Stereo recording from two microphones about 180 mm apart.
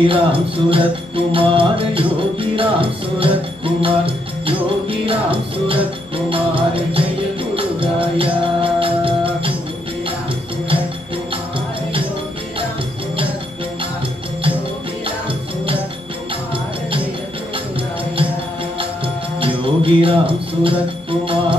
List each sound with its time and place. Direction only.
0.0 s music: 30° right (ahead or behind)
19.4 s music: 30° right (ahead or behind)